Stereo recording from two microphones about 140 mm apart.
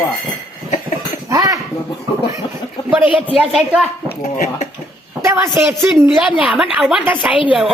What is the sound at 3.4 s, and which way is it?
Speech, 10° right (ahead or behind).